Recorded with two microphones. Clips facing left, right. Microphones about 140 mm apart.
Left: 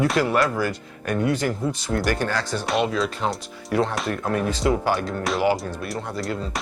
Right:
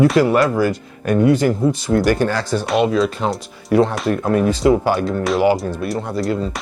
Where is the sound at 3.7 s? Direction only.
15° right (ahead or behind).